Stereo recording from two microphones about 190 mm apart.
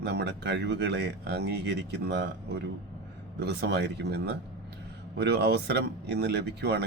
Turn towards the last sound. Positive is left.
turn(degrees=-60)  # may be behind; listen again after turning